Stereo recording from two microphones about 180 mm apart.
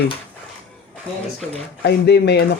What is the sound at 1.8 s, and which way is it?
Speech, 65° left (ahead or behind).